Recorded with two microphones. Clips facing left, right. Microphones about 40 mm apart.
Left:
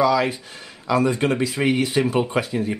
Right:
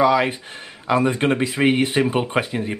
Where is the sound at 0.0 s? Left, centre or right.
Right.